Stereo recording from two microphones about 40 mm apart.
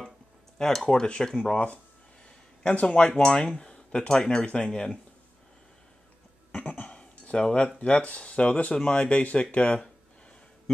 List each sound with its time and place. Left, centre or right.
0.6 s speech: centre
2.7 s speech: left
3.1 s speech: centre
3.5 s a sound: left
4.1 s speech: centre
6.5 s a sound: left
8.2 s speech: left